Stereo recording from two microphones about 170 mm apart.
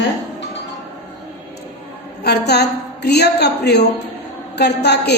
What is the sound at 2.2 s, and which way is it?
A woman's voice, 75° left (ahead or behind).